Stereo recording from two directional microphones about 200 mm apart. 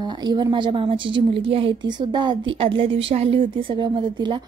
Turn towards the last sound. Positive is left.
turn(degrees=-25)  # may be behind; listen again after turning